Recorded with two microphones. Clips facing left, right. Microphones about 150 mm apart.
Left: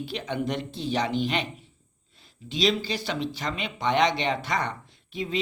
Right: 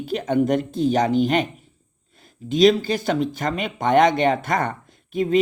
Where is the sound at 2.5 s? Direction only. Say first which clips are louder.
Right 9 dB; 50° right (ahead or behind).